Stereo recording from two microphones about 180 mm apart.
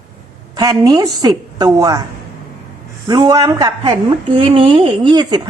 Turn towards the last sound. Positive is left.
turn(degrees=-25)  # may be behind; listen again after turning